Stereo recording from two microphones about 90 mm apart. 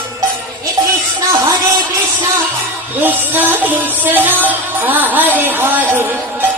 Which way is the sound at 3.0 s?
20° right (ahead or behind).